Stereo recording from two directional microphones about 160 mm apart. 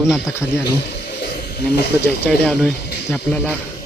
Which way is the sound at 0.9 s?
85° left.